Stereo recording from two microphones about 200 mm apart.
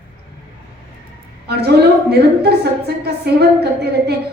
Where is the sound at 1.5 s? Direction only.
55° right (ahead or behind).